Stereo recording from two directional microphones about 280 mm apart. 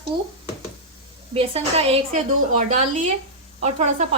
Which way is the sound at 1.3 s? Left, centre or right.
Right.